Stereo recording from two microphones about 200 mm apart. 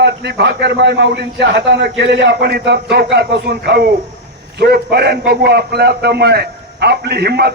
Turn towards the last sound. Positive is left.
turn(degrees=-55)  # may be behind; listen again after turning